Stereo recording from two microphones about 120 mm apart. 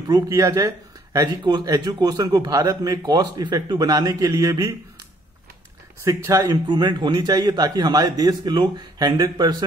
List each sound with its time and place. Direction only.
0.1 s speech: 30° right (ahead or behind)
6.0 s speech: 25° right (ahead or behind)
6.6 s speech: 40° right (ahead or behind)